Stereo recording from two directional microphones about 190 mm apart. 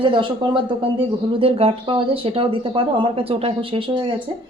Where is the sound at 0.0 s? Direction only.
25° right (ahead or behind).